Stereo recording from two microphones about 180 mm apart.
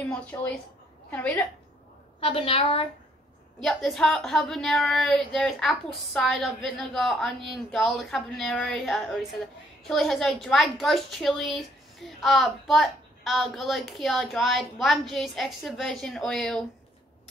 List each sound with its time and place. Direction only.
0.3 s a woman's voice: 15° left (ahead or behind)
2.1 s a woman's voice: 30° left (ahead or behind)
3.6 s a woman's voice: centre (ahead or behind)